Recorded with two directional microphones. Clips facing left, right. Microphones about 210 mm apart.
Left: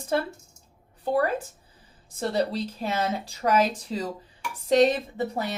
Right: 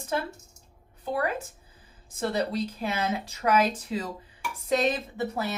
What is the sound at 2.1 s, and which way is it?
Speech, 35° left (ahead or behind).